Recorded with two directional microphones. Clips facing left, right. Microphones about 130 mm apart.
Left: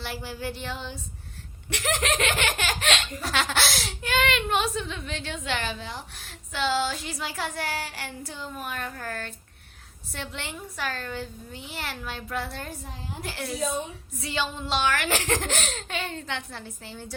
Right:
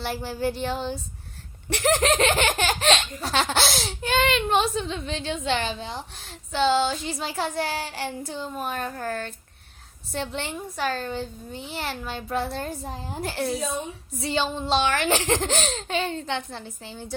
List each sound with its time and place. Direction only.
0.0 s a child's voice: 35° right (ahead or behind)
1.7 s laughter: 35° right (ahead or behind)
10.1 s a child's voice: 30° right (ahead or behind)
14.2 s laughter: 30° right (ahead or behind)